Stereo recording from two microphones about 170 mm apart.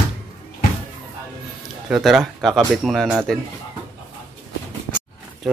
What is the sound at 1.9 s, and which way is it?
Speech, centre (ahead or behind).